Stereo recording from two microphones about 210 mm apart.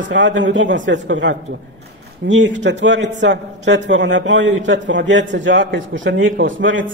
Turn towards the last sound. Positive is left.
turn(degrees=-65)  # may be behind; listen again after turning